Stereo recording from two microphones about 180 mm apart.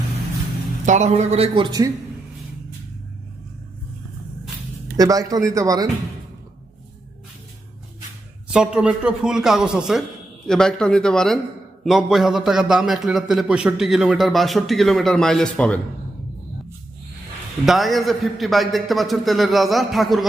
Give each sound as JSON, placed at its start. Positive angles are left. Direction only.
{"t": 0.9, "sound": "a man's voice", "side_deg": -40}
{"t": 4.9, "sound": "speech", "side_deg": -20}
{"t": 8.5, "sound": "a man's voice", "side_deg": -5}
{"t": 17.7, "sound": "a man's voice", "side_deg": 0}